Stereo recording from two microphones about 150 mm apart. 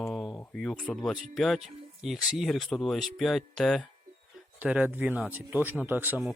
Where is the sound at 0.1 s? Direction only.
Centre (ahead or behind).